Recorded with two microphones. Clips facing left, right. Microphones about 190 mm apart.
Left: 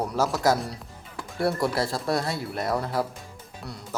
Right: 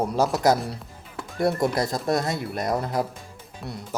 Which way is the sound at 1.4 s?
20° right (ahead or behind).